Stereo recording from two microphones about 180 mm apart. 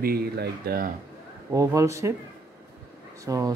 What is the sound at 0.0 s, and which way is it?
Speech, 60° right (ahead or behind).